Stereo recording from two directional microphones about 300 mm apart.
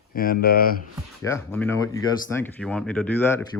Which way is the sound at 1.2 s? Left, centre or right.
Centre.